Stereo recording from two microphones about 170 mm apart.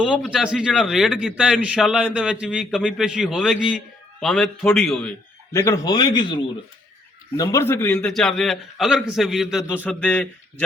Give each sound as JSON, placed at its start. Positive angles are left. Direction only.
{"t": 0.0, "sound": "a man's voice", "side_deg": -5}
{"t": 5.6, "sound": "a man's voice", "side_deg": 20}